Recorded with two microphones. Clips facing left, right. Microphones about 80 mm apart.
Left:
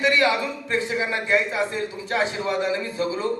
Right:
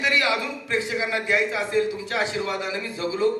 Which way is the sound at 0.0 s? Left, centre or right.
Left.